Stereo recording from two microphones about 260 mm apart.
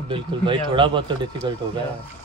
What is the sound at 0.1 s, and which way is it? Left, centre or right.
A man's voice, centre.